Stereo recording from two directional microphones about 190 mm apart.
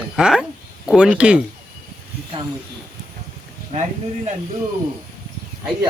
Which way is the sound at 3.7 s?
35° right (ahead or behind).